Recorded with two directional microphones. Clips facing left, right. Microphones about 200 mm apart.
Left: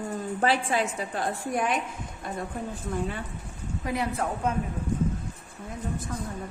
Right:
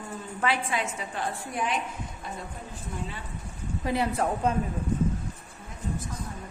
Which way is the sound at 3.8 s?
30° right (ahead or behind).